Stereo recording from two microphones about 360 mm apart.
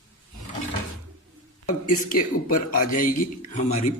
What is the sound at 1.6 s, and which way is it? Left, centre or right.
Speech, left.